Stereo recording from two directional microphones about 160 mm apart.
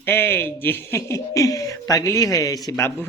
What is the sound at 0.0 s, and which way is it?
Speech, 15° left (ahead or behind).